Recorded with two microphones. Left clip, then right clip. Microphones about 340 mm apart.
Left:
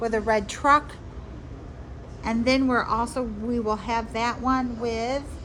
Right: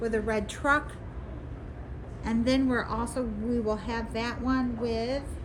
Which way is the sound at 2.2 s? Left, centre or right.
Centre.